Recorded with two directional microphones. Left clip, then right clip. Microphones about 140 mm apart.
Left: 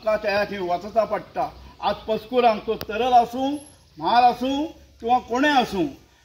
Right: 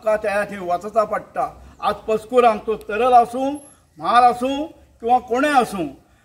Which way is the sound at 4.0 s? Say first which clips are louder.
Right 3 dB; 25° right (ahead or behind).